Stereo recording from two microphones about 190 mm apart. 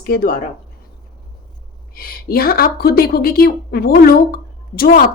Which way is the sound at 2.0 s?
50° left (ahead or behind).